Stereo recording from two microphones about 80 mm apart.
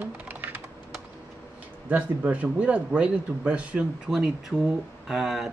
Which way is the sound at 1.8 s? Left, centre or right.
Centre.